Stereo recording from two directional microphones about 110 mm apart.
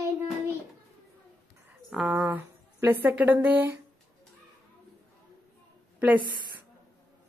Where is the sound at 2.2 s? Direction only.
15° right (ahead or behind).